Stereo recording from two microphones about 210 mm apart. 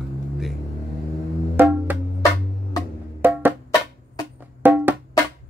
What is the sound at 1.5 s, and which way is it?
Music, 10° right (ahead or behind).